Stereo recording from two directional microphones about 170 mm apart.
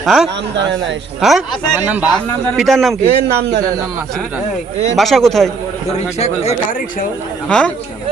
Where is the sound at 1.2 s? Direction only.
Centre (ahead or behind).